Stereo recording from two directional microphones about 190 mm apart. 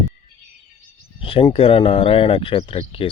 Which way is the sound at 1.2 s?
30° left (ahead or behind).